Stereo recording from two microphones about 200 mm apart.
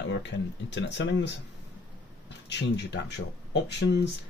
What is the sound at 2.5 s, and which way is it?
Speech, 60° left (ahead or behind).